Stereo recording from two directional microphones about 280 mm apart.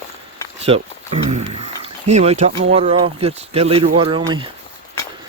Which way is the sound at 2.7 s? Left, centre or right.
Right.